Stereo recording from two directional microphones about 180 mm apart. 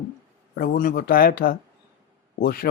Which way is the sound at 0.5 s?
50° left (ahead or behind).